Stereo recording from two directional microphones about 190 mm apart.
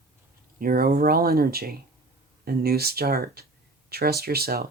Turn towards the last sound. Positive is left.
turn(degrees=-55)  # may be behind; listen again after turning